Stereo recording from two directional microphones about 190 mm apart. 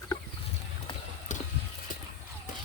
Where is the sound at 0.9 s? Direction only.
25° left (ahead or behind).